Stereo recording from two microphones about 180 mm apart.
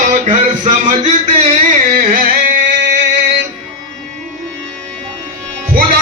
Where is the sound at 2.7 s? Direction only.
85° right.